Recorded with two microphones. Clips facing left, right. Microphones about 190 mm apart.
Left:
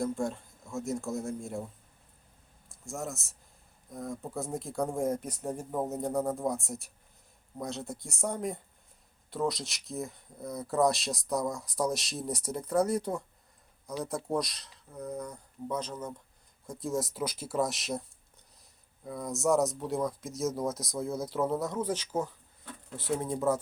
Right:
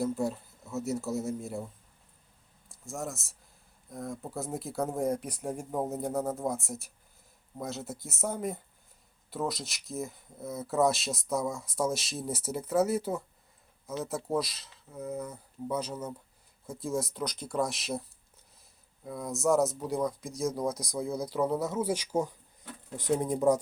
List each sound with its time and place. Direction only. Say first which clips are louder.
0.0 s speech: right 1 dB; 5° right (ahead or behind)
19.0 s speech: right 1 dB; centre (ahead or behind)